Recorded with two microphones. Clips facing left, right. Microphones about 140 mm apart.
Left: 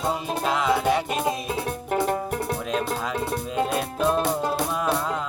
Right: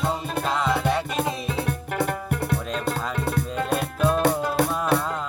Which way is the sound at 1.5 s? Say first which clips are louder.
Left 1 dB; 35° left (ahead or behind).